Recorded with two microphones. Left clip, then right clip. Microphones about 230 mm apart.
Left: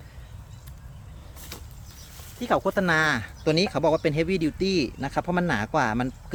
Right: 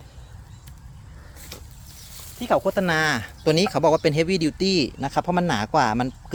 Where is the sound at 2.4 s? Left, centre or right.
Centre.